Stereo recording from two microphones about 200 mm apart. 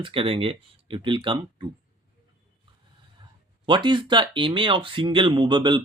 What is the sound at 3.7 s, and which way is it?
Speech, 25° right (ahead or behind).